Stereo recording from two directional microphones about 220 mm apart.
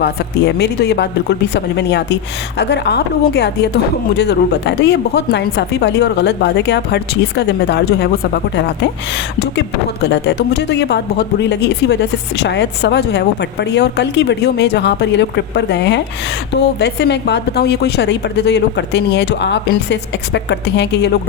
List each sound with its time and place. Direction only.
0.0 s speech: 50° left (ahead or behind)